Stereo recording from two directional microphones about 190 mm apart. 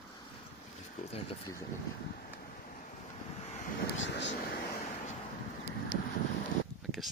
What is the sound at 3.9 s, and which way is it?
Speech, 70° left (ahead or behind).